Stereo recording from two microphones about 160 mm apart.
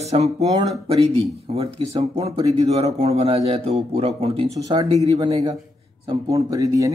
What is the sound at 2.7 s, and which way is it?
Speech, 40° right (ahead or behind).